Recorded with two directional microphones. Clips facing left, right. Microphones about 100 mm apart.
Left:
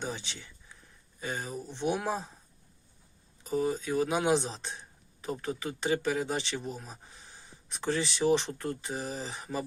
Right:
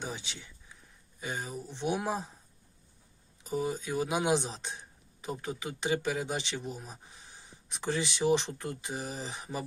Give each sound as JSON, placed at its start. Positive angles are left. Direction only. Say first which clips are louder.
{"t": 0.0, "sound": "speech", "louder": "left 2 dB", "side_deg": -10}
{"t": 3.4, "sound": "speech", "louder": "left 3 dB", "side_deg": -10}